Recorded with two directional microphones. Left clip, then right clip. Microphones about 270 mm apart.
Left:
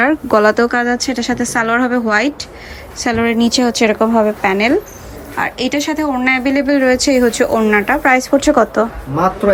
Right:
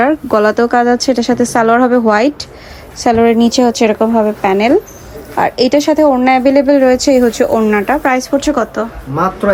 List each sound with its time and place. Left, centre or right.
0.0 s a woman's voice: centre